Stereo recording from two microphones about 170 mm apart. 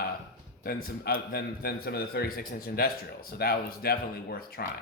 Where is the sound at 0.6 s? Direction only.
65° left (ahead or behind).